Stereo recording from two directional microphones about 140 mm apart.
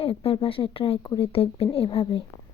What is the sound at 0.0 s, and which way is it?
A woman's voice, 45° left (ahead or behind).